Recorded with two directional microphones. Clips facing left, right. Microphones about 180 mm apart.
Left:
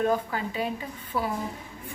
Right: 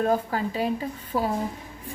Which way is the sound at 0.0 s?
40° right (ahead or behind).